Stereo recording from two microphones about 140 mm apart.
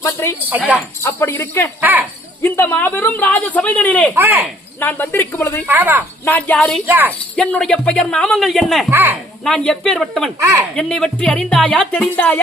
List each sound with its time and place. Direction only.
0.0 s speech: 20° left (ahead or behind)
1.8 s speech: 15° right (ahead or behind)
2.4 s speech: 15° left (ahead or behind)
4.1 s speech: 15° right (ahead or behind)
4.8 s speech: 15° left (ahead or behind)
5.6 s speech: 15° right (ahead or behind)
6.2 s speech: 10° left (ahead or behind)
6.8 s speech: 15° right (ahead or behind)
7.3 s speech: 5° left (ahead or behind)
8.9 s speech: 15° right (ahead or behind)
9.4 s speech: 5° left (ahead or behind)
10.4 s speech: 15° right (ahead or behind)
10.8 s speech: 5° left (ahead or behind)